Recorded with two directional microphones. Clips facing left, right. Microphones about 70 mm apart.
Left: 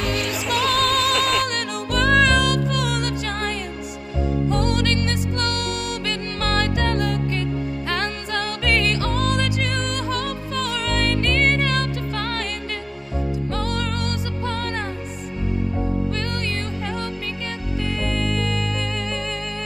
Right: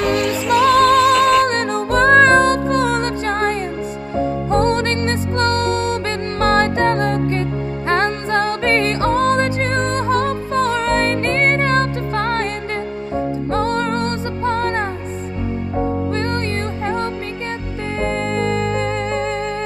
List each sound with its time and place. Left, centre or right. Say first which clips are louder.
0.0 s music: right 7 dB; centre
1.4 s music: right 8 dB; right